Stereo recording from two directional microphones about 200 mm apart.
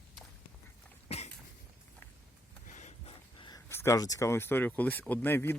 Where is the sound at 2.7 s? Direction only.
35° left (ahead or behind); by 5.5 s 10° left (ahead or behind).